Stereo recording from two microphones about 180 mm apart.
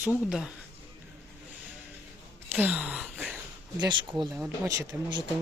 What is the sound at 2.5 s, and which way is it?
Gasp, 10° right (ahead or behind).